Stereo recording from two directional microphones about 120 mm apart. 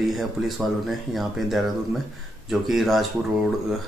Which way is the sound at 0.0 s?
Centre (ahead or behind).